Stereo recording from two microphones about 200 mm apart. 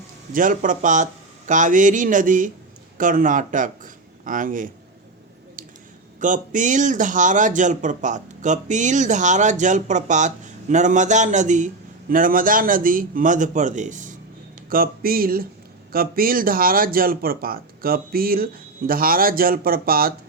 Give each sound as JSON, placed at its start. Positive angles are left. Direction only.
{"t": 0.3, "sound": "speech", "side_deg": -40}
{"t": 6.1, "sound": "speech", "side_deg": -40}